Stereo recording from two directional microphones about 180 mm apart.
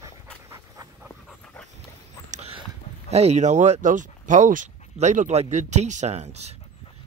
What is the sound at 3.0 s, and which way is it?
Speech, 35° right (ahead or behind).